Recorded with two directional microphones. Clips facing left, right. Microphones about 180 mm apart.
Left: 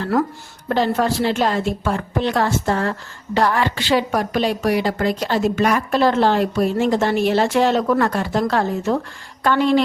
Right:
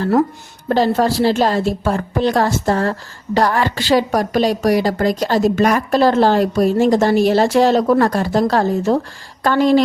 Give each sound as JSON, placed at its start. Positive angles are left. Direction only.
{"t": 0.0, "sound": "a woman's voice", "side_deg": -25}